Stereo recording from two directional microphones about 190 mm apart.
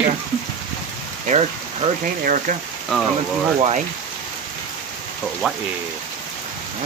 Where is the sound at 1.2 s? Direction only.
40° right (ahead or behind).